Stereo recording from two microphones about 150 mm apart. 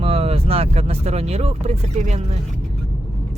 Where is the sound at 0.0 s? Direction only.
40° right (ahead or behind).